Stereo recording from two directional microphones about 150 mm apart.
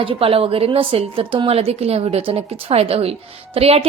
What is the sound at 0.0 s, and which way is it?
Speech, 40° right (ahead or behind).